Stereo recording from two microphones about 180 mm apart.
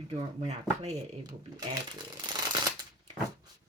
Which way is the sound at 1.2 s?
25° right (ahead or behind).